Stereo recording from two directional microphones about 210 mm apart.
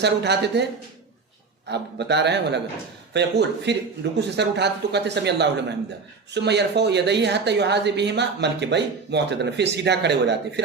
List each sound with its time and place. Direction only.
0.0 s a man's voice: 55° right (ahead or behind)
1.6 s a man's voice: 55° right (ahead or behind)